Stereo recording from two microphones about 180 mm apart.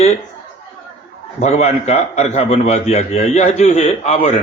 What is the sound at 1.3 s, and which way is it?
A man's voice, 35° left (ahead or behind).